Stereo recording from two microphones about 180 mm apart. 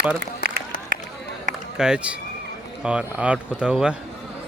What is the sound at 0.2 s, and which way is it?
Speech, 60° right (ahead or behind).